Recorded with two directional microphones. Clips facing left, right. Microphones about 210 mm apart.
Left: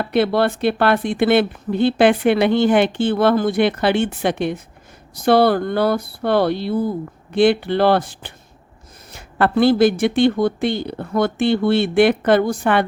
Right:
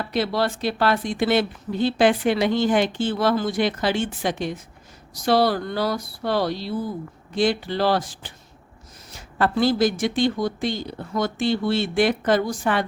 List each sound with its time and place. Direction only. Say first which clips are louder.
0.0 s speech: left 6 dB; 60° left (ahead or behind)